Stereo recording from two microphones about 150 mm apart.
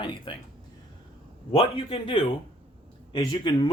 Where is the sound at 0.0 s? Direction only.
30° left (ahead or behind).